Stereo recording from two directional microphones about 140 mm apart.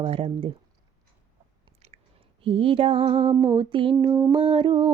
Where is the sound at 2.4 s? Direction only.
40° right (ahead or behind).